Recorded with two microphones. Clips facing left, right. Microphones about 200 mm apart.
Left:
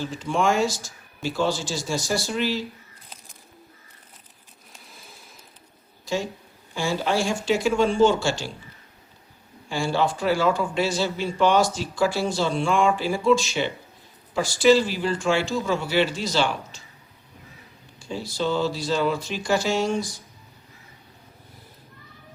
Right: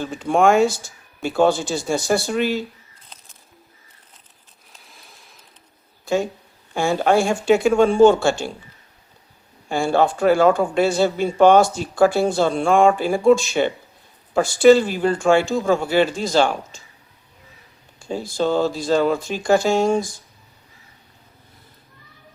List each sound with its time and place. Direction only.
0.0 s speech: 55° right (ahead or behind)
4.7 s a sound: centre (ahead or behind)
6.7 s speech: 55° right (ahead or behind)
9.6 s speech: 55° right (ahead or behind)
18.0 s speech: 50° right (ahead or behind)